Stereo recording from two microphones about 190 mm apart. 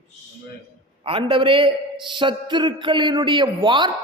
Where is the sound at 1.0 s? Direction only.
30° right (ahead or behind).